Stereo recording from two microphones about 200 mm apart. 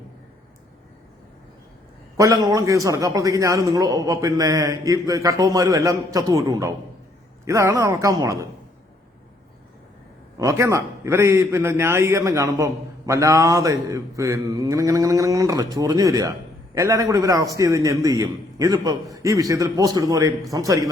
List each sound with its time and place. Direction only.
2.1 s a man's voice: 15° right (ahead or behind)
10.3 s a man's voice: 15° right (ahead or behind)